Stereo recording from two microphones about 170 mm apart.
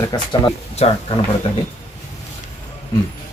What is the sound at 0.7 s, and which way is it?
Speech, 35° left (ahead or behind).